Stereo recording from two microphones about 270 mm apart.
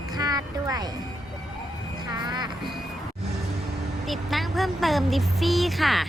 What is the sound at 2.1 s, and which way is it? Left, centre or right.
Music, centre.